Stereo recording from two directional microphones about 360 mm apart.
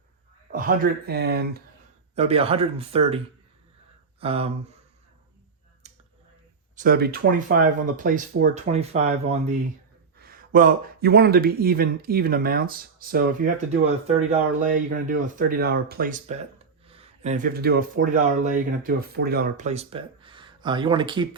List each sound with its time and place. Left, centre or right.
0.5 s speech: right
2.1 s speech: centre
4.2 s speech: centre
5.8 s a sound: centre
6.7 s speech: right